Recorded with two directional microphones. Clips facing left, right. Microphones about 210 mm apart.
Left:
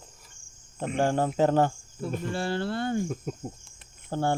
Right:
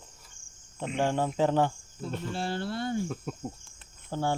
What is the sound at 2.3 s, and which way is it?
Speech, 60° left (ahead or behind).